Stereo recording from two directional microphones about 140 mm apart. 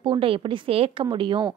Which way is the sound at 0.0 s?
40° right (ahead or behind).